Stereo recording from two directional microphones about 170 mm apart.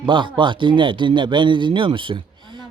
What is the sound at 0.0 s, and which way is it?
A woman's voice, 30° right (ahead or behind).